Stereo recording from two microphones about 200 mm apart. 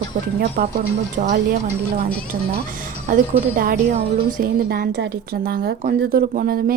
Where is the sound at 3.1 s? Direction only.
45° right (ahead or behind).